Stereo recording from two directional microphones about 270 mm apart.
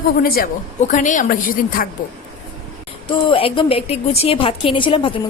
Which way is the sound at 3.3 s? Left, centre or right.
Centre.